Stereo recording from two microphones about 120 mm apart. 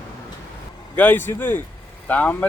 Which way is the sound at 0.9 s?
15° left (ahead or behind).